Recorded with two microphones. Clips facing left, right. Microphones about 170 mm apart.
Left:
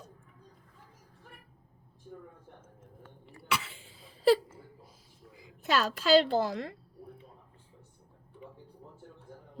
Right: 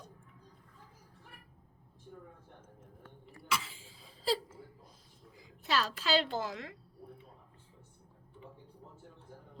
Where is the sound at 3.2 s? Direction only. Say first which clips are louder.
Left 2 dB; 65° left (ahead or behind).